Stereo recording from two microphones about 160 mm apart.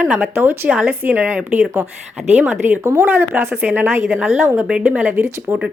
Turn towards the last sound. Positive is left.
turn(degrees=-15)  # may be behind; listen again after turning